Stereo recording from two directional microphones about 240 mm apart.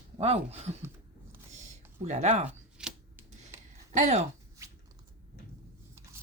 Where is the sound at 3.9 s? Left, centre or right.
Right.